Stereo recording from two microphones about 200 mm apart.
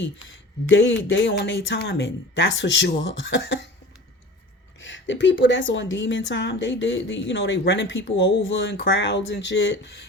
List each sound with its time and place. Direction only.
0.7 s speech: 65° left (ahead or behind)
4.8 s a woman's voice: 65° left (ahead or behind)